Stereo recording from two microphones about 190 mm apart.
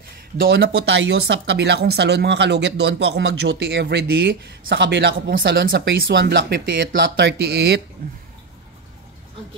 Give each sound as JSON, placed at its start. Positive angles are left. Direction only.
{"t": 0.5, "sound": "speech", "side_deg": -70}